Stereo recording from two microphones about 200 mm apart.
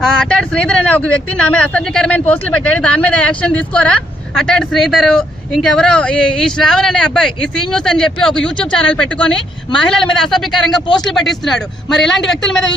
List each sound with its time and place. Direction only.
0.0 s speech: 5° left (ahead or behind)
10.8 s speech: 20° left (ahead or behind)
11.1 s speech: centre (ahead or behind)